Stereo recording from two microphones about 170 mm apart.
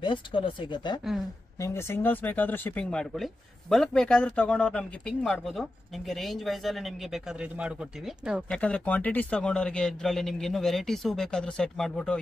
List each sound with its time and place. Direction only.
0.0 s speech: 30° left (ahead or behind)
1.6 s speech: 15° left (ahead or behind); by 7.7 s 5° right (ahead or behind)
8.5 s speech: 5° left (ahead or behind)